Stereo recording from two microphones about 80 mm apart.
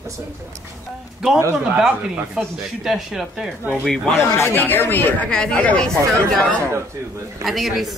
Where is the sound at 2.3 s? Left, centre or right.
Centre.